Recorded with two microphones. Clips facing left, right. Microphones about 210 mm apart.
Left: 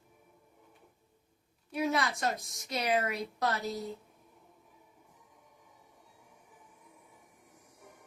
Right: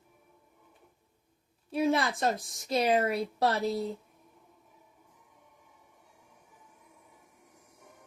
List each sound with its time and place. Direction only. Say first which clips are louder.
1.7 s a woman's voice: right 4 dB; 30° right (ahead or behind)